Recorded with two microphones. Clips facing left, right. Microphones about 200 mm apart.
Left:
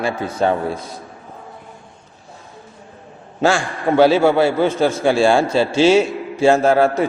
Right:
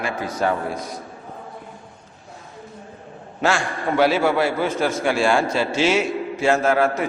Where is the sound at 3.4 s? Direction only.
30° left (ahead or behind).